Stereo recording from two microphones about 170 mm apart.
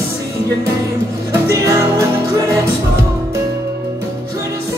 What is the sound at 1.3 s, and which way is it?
Music, 20° right (ahead or behind).